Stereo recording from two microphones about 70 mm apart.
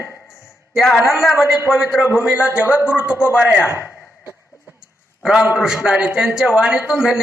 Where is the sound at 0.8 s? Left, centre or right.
Centre.